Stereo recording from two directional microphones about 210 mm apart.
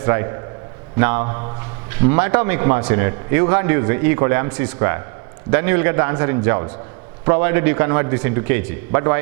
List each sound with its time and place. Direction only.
0.0 s a man's voice: 15° right (ahead or behind)